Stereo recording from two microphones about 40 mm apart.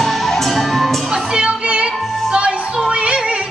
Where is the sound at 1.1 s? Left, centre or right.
Centre.